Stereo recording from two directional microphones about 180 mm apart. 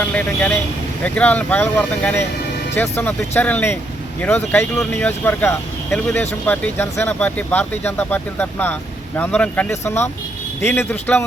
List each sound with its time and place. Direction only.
0.1 s speech: 10° left (ahead or behind)